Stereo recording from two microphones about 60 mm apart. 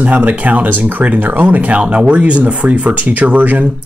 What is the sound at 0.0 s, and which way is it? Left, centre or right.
Speech, right.